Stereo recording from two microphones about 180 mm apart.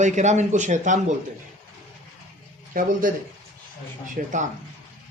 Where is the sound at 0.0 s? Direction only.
40° right (ahead or behind).